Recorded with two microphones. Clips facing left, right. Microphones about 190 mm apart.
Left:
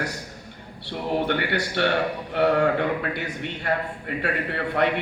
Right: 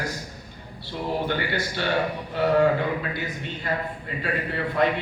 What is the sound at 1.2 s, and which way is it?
A man's voice, 65° left (ahead or behind).